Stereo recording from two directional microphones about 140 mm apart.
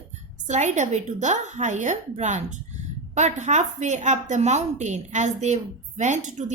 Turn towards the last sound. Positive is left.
turn(degrees=-55)  # may be behind; listen again after turning